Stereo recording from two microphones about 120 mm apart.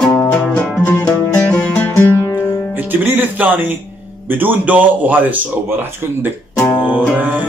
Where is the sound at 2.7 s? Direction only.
15° right (ahead or behind).